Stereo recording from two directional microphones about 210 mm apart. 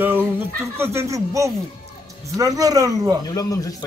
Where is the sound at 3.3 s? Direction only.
15° left (ahead or behind).